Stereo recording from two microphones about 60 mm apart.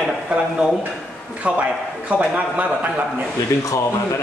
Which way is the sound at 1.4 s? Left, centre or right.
Right.